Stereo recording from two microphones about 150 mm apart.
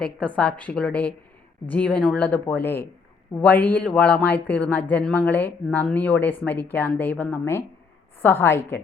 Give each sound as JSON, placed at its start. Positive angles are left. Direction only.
{"t": 0.3, "sound": "speech", "side_deg": 10}